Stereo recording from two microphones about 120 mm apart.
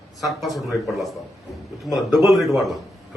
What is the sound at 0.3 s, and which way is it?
A man's voice, centre (ahead or behind).